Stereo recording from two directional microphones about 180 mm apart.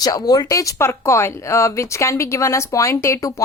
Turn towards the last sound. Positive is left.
turn(degrees=15)  # may be behind; listen again after turning